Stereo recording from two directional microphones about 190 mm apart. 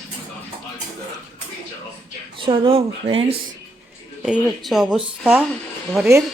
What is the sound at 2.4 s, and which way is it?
Speech, 30° right (ahead or behind).